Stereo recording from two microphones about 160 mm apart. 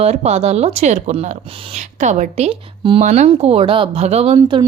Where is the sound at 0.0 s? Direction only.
40° right (ahead or behind).